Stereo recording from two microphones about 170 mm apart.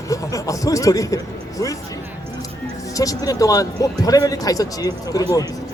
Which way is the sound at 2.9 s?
20° left (ahead or behind).